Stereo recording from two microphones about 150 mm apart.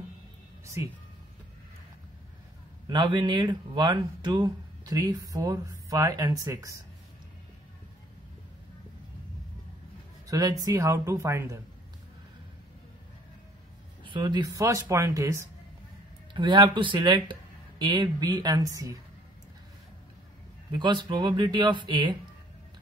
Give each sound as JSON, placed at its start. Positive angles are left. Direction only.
{"t": 0.8, "sound": "speech", "side_deg": -20}
{"t": 2.9, "sound": "speech", "side_deg": -30}
{"t": 10.2, "sound": "speech", "side_deg": -25}
{"t": 14.0, "sound": "speech", "side_deg": -30}
{"t": 16.3, "sound": "speech", "side_deg": -35}
{"t": 20.8, "sound": "speech", "side_deg": -30}